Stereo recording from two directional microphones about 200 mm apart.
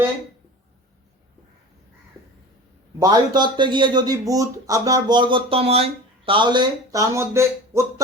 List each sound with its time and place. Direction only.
3.0 s speech: 20° right (ahead or behind)